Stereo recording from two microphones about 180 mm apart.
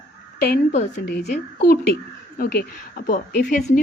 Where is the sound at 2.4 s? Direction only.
60° left (ahead or behind).